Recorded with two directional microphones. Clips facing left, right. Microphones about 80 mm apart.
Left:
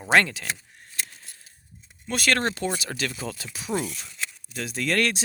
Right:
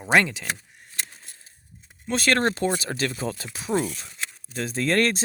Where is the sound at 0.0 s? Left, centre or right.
Centre.